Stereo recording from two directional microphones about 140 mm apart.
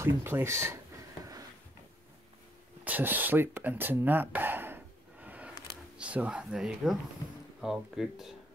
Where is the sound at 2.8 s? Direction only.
10° right (ahead or behind).